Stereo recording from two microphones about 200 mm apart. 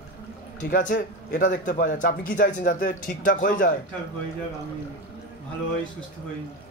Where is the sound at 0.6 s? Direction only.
45° left (ahead or behind).